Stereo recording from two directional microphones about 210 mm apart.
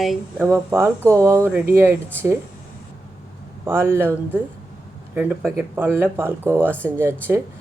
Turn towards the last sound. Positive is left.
turn(degrees=-10)  # may be behind; listen again after turning